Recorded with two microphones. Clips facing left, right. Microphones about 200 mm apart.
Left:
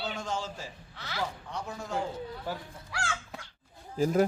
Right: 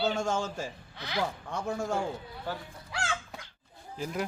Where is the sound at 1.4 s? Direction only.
50° right (ahead or behind).